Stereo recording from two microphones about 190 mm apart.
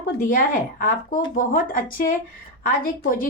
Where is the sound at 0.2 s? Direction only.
45° left (ahead or behind).